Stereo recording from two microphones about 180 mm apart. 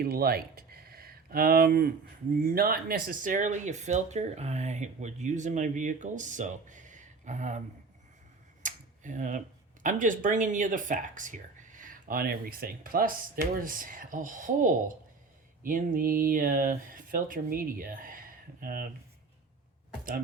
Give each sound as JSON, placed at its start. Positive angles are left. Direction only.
{"t": 0.0, "sound": "speech", "side_deg": -60}
{"t": 8.6, "sound": "tick-tock", "side_deg": -45}
{"t": 9.8, "sound": "speech", "side_deg": -45}